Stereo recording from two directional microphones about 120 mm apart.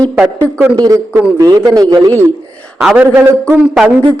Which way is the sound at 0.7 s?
30° right (ahead or behind).